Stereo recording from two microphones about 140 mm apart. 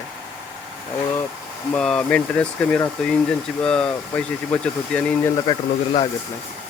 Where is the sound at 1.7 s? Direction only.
5° left (ahead or behind).